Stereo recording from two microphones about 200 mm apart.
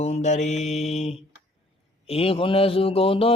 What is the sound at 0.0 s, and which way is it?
Mantra, 35° left (ahead or behind).